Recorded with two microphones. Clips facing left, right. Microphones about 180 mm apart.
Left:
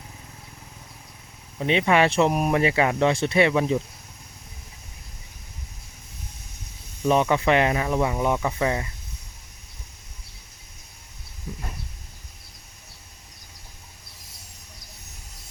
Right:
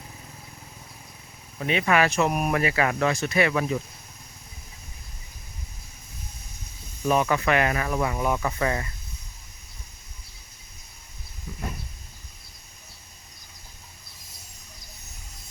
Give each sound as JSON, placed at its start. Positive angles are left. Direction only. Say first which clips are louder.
{"t": 1.5, "sound": "speech", "louder": "left 2 dB", "side_deg": 25}
{"t": 7.1, "sound": "speech", "louder": "left 2 dB", "side_deg": 25}